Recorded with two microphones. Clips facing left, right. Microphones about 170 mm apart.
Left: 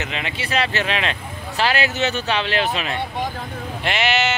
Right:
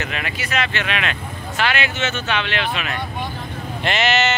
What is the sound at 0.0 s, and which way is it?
Speech, 20° left (ahead or behind).